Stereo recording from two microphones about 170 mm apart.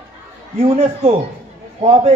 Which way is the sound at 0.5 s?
35° right (ahead or behind).